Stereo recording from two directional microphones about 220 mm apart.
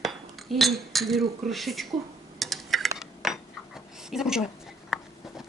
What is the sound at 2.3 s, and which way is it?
Dishes, centre (ahead or behind).